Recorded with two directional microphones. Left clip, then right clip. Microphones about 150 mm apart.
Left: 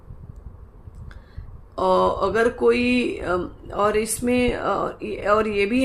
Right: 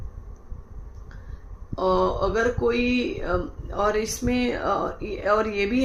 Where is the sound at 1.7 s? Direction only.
60° left (ahead or behind).